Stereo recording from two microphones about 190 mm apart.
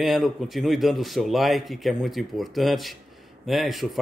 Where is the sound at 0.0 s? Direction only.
Centre (ahead or behind).